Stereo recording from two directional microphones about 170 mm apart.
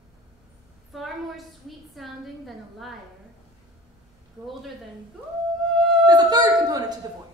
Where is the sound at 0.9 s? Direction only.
Centre (ahead or behind).